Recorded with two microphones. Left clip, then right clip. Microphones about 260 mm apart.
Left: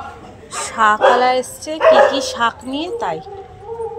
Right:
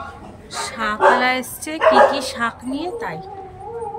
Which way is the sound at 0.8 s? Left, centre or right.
Centre.